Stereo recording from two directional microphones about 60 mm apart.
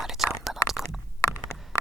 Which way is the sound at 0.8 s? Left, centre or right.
Centre.